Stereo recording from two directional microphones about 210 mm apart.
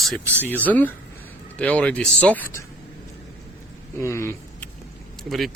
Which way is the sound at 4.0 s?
15° left (ahead or behind).